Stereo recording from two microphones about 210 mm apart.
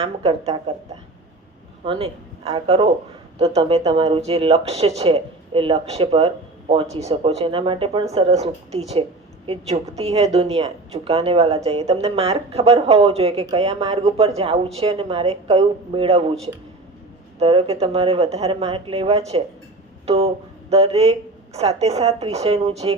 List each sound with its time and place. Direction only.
0.0 s speech: 30° right (ahead or behind)
1.8 s speech: 25° right (ahead or behind)
17.4 s speech: 25° right (ahead or behind)